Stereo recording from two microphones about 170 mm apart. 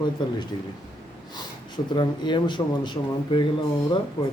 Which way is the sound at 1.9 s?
25° left (ahead or behind).